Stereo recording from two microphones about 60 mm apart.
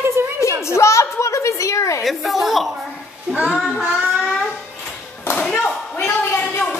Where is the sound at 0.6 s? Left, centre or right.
Left.